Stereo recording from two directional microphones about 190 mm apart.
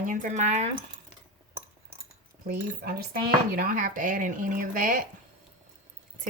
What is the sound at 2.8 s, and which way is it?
Speech, 50° right (ahead or behind).